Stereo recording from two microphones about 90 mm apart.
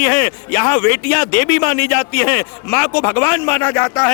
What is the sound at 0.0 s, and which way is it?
Speech, 20° left (ahead or behind).